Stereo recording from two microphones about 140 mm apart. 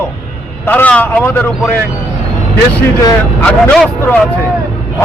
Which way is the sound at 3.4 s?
10° left (ahead or behind).